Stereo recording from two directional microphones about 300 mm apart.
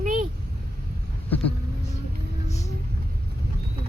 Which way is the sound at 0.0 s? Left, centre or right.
Right.